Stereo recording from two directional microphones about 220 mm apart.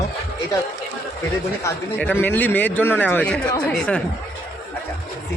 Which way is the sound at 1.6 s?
10° left (ahead or behind).